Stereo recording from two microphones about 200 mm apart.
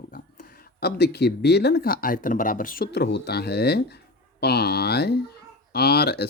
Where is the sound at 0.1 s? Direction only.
45° left (ahead or behind).